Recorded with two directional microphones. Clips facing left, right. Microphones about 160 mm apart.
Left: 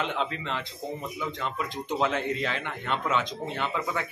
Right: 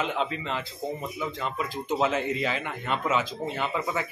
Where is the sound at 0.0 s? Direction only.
5° right (ahead or behind).